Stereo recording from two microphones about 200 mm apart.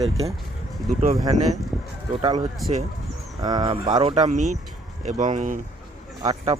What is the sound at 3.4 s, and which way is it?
Speech, 20° right (ahead or behind).